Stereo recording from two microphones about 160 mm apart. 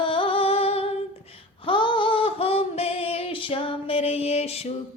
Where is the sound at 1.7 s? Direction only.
30° left (ahead or behind).